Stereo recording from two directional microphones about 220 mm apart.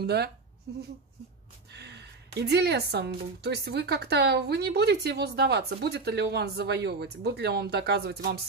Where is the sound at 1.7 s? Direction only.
50° right (ahead or behind).